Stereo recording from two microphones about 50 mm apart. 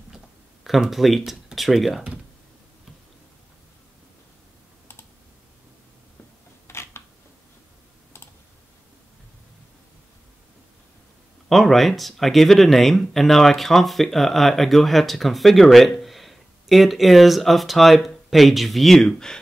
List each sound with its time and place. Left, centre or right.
0.7 s speech: centre
6.7 s a sound: left
11.4 s speech: centre